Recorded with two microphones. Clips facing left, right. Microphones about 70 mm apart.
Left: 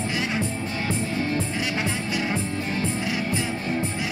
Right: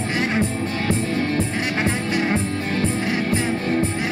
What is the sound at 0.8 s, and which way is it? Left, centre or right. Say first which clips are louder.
Music: right 4 dB; right.